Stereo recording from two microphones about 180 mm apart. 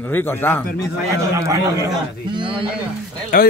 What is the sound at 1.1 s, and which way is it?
Speech, 15° right (ahead or behind).